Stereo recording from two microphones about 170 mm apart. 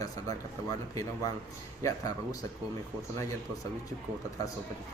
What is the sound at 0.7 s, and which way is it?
Speech, 20° left (ahead or behind).